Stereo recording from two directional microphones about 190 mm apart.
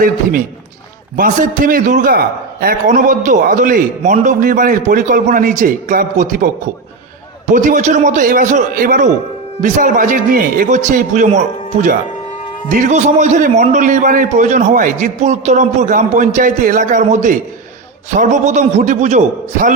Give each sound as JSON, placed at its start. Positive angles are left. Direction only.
{"t": 0.0, "sound": "a man's voice", "side_deg": -45}